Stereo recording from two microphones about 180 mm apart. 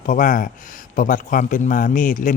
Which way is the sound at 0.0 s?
45° left (ahead or behind).